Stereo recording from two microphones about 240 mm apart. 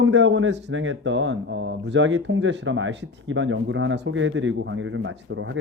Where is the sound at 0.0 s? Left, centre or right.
Right.